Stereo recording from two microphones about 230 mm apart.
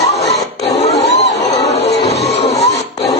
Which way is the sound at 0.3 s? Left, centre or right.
Left.